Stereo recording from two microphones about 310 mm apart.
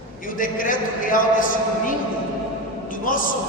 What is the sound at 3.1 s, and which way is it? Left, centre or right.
Speech, left.